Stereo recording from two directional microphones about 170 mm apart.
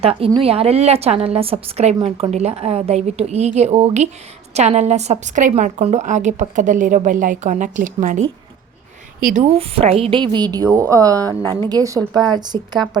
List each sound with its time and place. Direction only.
0.0 s a woman's voice: 35° right (ahead or behind)
2.0 s a woman's voice: 25° right (ahead or behind)
2.3 s a woman's voice: 40° right (ahead or behind)